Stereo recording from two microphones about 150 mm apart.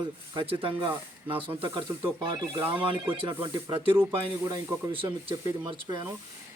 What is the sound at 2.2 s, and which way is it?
Speech, 30° right (ahead or behind).